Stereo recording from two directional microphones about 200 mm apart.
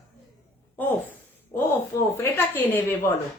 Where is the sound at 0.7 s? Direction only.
10° left (ahead or behind).